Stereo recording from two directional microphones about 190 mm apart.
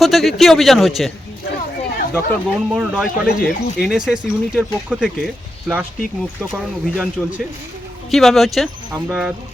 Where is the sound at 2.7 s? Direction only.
5° right (ahead or behind).